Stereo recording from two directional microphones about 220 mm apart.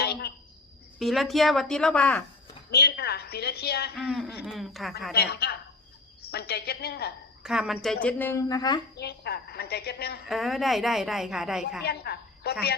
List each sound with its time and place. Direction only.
0.0 s a sound: 45° left (ahead or behind)
0.9 s a woman's voice: centre (ahead or behind)
2.6 s a woman's voice: 45° left (ahead or behind)
3.9 s a woman's voice: centre (ahead or behind)
5.1 s a woman's voice: 45° left (ahead or behind)
7.4 s a woman's voice: 5° right (ahead or behind); by 8.8 s 15° left (ahead or behind)
9.0 s a woman's voice: 45° left (ahead or behind)
10.2 s a woman's voice: centre (ahead or behind)
11.8 s a woman's voice: 45° left (ahead or behind)